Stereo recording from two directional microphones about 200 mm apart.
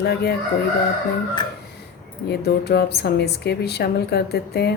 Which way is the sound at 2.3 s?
55° left (ahead or behind).